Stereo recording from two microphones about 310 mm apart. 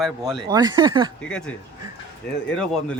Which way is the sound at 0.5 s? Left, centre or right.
Centre.